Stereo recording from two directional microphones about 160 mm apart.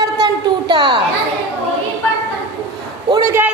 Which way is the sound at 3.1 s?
15° right (ahead or behind).